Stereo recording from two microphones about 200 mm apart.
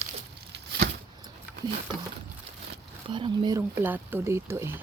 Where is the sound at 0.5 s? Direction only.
55° right (ahead or behind).